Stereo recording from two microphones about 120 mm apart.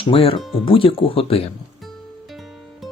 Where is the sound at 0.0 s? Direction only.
50° left (ahead or behind).